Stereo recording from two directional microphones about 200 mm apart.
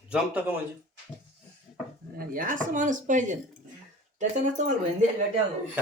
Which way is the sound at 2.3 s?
40° right (ahead or behind).